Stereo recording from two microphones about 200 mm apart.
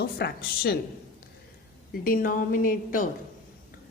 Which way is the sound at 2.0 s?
45° left (ahead or behind).